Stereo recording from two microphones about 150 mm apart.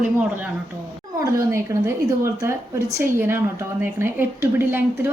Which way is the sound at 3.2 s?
15° right (ahead or behind).